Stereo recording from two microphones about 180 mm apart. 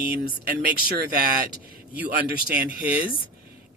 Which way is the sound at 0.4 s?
60° right (ahead or behind).